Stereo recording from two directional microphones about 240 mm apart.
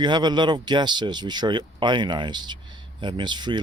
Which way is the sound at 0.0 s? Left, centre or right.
Centre.